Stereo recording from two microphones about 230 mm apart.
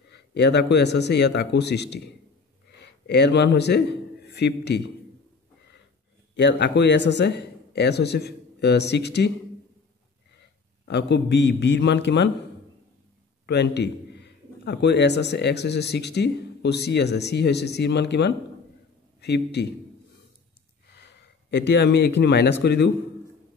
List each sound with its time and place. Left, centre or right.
0.1 s a man's voice: left
6.3 s a man's voice: left
10.9 s a man's voice: left
13.5 s a man's voice: left
20.9 s speech: left